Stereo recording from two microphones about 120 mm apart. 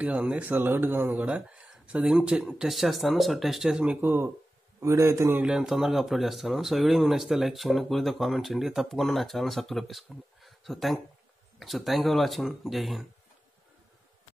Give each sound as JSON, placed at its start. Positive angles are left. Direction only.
{"t": 0.0, "sound": "a man's voice", "side_deg": -10}
{"t": 5.4, "sound": "speech", "side_deg": -5}